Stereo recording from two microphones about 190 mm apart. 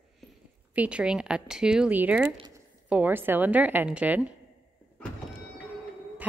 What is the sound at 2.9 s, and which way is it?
A woman's voice, 10° right (ahead or behind).